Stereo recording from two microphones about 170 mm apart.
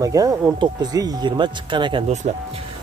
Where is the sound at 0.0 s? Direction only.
20° right (ahead or behind).